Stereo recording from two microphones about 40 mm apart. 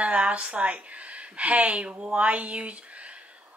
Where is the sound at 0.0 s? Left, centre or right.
Right.